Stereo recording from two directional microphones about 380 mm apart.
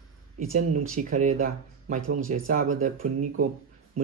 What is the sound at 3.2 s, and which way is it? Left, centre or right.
Speech, right.